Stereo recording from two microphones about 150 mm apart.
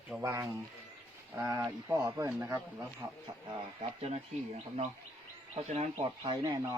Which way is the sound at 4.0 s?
45° right (ahead or behind).